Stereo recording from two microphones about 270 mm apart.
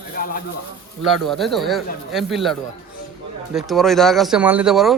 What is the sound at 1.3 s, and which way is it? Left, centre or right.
A man's voice, centre.